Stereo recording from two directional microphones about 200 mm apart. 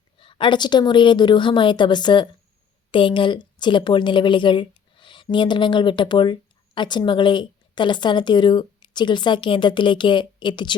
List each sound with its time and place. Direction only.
0.2 s a woman's voice: 25° left (ahead or behind)